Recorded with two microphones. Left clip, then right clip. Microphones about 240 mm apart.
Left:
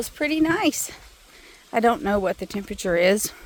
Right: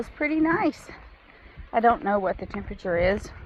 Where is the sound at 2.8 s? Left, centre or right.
Left.